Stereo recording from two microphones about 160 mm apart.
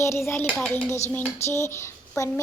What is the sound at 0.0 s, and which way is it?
Speech, 15° left (ahead or behind).